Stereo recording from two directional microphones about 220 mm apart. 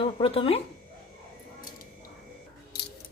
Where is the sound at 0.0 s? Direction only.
25° left (ahead or behind).